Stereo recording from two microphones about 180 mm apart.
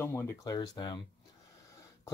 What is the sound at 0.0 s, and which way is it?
Speech, 15° left (ahead or behind).